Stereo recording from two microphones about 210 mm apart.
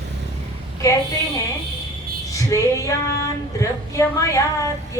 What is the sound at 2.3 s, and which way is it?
Speech, 15° left (ahead or behind).